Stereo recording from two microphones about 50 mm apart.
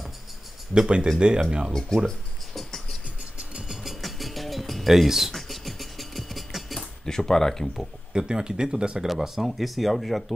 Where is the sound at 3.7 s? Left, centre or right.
Centre.